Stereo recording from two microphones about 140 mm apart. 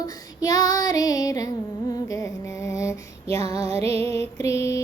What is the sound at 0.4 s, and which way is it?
Child singing, 25° left (ahead or behind).